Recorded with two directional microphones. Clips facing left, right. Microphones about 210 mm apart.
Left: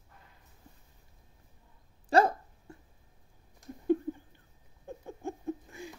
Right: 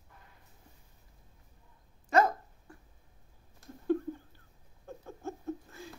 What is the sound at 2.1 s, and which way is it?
Dog, 30° left (ahead or behind).